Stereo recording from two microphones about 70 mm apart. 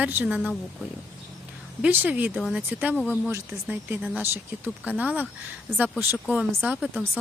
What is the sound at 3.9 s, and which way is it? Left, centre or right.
Speech, centre.